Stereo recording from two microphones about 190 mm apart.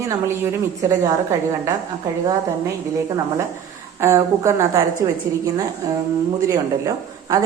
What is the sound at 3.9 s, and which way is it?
Speech, 15° right (ahead or behind).